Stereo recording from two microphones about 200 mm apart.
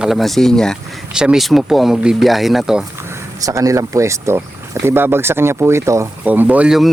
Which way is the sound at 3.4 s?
15° right (ahead or behind).